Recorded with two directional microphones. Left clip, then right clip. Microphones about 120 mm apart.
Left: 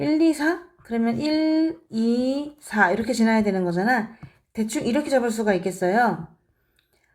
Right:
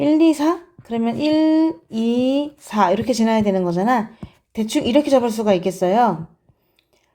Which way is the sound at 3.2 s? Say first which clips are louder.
Right 4 dB; 55° right (ahead or behind).